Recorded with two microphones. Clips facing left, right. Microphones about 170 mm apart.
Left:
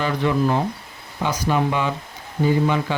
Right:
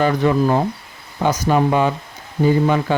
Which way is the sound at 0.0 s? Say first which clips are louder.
Right 4 dB; 45° right (ahead or behind).